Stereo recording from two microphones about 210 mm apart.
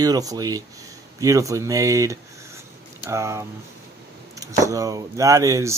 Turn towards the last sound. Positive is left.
turn(degrees=-15)  # may be behind; listen again after turning